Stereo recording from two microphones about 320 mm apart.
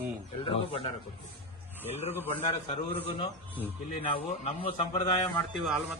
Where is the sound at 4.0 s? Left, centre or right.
Centre.